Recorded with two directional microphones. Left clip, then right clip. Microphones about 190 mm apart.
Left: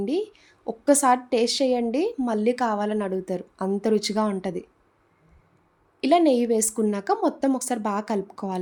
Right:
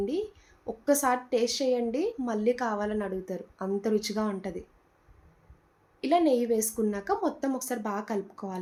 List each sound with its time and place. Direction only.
0.0 s a woman's voice: 55° left (ahead or behind)
6.0 s a woman's voice: 55° left (ahead or behind)